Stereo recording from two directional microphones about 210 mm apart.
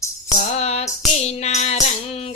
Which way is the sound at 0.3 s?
30° left (ahead or behind).